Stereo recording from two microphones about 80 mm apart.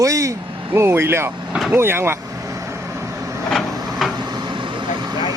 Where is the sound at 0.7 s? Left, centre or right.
Right.